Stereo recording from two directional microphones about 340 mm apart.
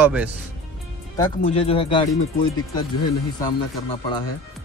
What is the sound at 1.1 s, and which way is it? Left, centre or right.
Speech, centre.